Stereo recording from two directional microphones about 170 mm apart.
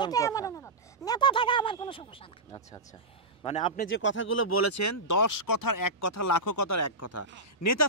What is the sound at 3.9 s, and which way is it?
Speech, 90° left.